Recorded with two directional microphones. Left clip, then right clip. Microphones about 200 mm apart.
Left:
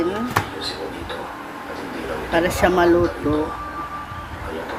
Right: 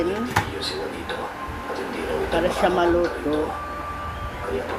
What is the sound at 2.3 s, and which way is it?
Speech, 20° left (ahead or behind).